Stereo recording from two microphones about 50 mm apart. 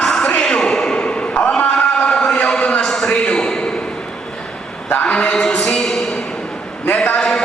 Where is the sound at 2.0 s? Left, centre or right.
Centre.